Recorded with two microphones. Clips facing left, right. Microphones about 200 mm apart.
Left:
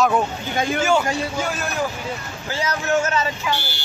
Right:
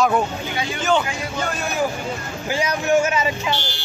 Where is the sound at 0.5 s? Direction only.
50° left (ahead or behind).